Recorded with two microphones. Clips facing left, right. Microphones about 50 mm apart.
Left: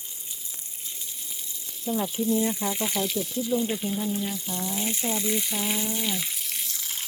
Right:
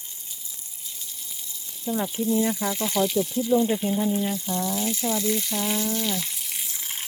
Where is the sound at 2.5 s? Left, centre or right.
Centre.